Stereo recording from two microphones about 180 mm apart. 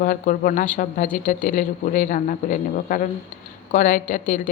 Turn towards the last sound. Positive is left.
turn(degrees=45)  # may be behind; listen again after turning